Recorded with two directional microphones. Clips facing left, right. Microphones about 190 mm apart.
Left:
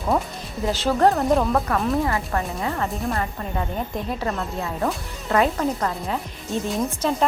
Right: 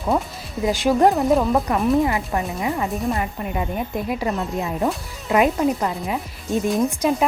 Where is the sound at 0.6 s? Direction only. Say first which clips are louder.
Right 2 dB; 15° right (ahead or behind).